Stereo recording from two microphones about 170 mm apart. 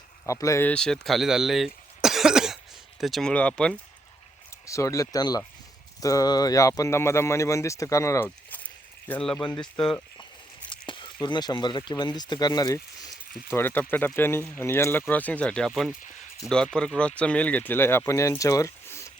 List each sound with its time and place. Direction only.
0.3 s speech: 20° left (ahead or behind)
0.7 s speech: 5° left (ahead or behind)
4.6 s speech: 20° left (ahead or behind)
10.7 s speech: 30° left (ahead or behind)